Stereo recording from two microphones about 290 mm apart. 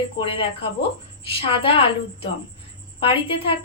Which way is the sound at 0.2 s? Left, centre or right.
Centre.